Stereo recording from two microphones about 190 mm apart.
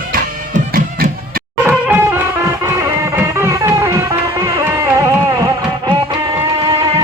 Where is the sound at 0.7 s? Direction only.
50° right (ahead or behind).